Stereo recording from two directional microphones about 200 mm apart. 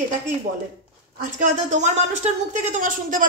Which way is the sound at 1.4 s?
35° right (ahead or behind).